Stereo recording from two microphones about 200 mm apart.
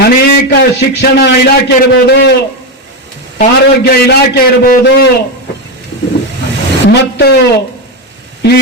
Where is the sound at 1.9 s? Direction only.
55° left (ahead or behind).